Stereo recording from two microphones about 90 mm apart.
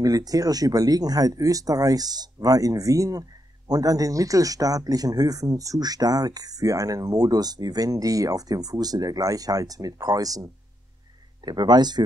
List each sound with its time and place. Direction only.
0.0 s speech: 45° right (ahead or behind)